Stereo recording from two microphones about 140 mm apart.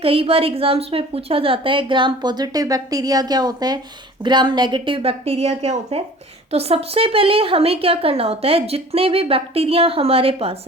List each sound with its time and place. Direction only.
0.0 s a woman's voice: 40° right (ahead or behind)